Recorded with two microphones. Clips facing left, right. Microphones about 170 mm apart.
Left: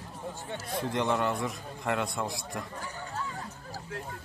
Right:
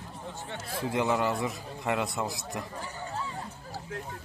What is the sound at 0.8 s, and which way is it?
A man's voice, 5° right (ahead or behind).